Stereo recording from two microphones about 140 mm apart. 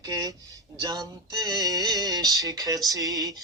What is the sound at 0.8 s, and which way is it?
Music, 30° right (ahead or behind).